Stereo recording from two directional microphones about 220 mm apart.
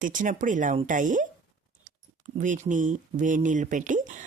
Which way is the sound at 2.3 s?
35° right (ahead or behind).